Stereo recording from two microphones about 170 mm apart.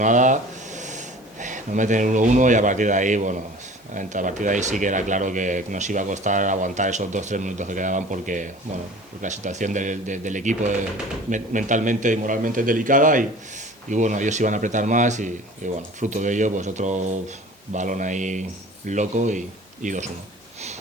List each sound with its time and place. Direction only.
0.0 s speech: 50° right (ahead or behind)